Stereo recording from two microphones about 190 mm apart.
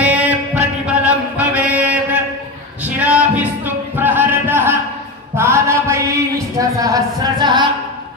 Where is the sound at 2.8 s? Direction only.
10° right (ahead or behind).